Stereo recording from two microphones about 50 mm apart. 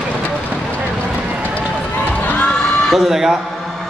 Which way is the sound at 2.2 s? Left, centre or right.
Left.